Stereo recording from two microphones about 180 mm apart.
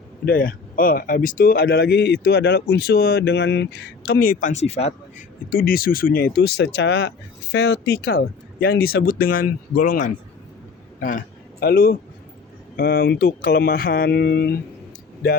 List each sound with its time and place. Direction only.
0.3 s speech: 50° left (ahead or behind); by 5.2 s 35° left (ahead or behind)
5.5 s speech: 55° left (ahead or behind)
11.6 s speech: 55° left (ahead or behind)